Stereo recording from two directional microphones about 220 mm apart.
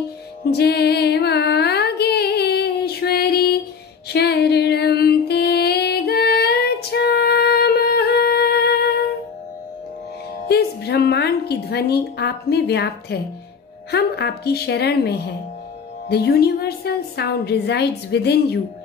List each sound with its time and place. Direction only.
0.5 s music: 45° left (ahead or behind)
10.5 s a sound: 45° left (ahead or behind)
13.8 s a woman's voice: 50° left (ahead or behind)